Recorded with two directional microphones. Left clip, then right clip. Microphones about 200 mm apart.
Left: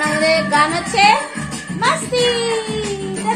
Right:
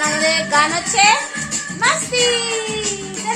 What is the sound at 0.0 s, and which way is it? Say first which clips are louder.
Music: left 2 dB; 10° right (ahead or behind).